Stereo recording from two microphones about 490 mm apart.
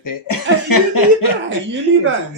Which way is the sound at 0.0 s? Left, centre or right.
Left.